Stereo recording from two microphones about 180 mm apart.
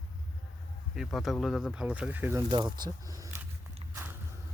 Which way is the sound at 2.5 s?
25° right (ahead or behind).